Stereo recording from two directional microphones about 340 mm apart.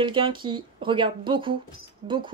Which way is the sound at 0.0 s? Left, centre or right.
Centre.